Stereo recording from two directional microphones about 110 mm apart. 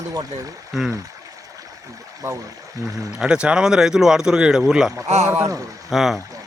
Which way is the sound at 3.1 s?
5° right (ahead or behind).